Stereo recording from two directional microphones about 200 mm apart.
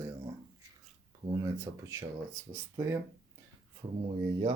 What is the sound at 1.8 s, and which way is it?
Speech, 15° right (ahead or behind).